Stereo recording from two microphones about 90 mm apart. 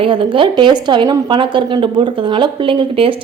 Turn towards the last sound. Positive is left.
turn(degrees=-70)  # may be behind; listen again after turning